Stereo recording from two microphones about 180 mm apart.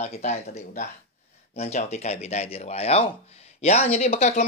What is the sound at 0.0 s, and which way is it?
Speech, 40° left (ahead or behind).